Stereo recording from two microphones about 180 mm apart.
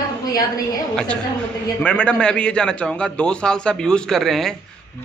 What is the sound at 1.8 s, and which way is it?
A man's voice, 5° left (ahead or behind).